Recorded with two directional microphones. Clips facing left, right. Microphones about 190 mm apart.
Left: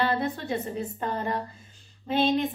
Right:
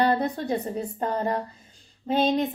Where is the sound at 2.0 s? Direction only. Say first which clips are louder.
Right 2 dB; 40° right (ahead or behind).